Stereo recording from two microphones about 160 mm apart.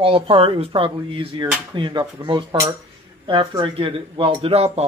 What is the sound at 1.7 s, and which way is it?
Cutlery, 30° right (ahead or behind).